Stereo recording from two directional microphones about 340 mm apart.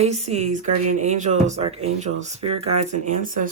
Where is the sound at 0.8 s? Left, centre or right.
Right.